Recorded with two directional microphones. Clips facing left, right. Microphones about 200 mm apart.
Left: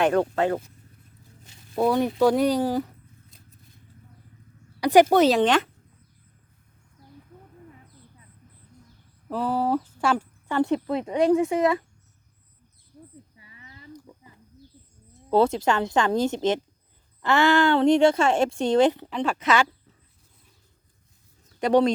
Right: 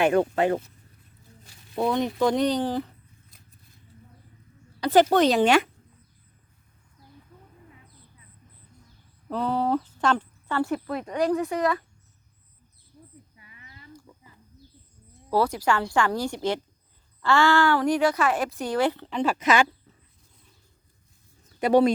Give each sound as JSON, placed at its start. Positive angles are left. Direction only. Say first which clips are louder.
{"t": 0.0, "sound": "speech", "louder": "even", "side_deg": -10}
{"t": 1.7, "sound": "speech", "louder": "left 3 dB", "side_deg": 5}
{"t": 4.8, "sound": "speech", "louder": "left 2 dB", "side_deg": 10}
{"t": 5.4, "sound": "speech", "louder": "right 1 dB", "side_deg": -10}
{"t": 9.3, "sound": "speech", "louder": "left 1 dB", "side_deg": 5}
{"t": 10.0, "sound": "a sound", "louder": "even", "side_deg": 10}
{"t": 10.6, "sound": "speech", "louder": "left 5 dB", "side_deg": 20}
{"t": 13.3, "sound": "a sound", "louder": "left 2 dB", "side_deg": 30}
{"t": 15.3, "sound": "speech", "louder": "left 3 dB", "side_deg": 25}
{"t": 19.1, "sound": "speech", "louder": "right 1 dB", "side_deg": -5}
{"t": 21.6, "sound": "speech", "louder": "right 1 dB", "side_deg": -10}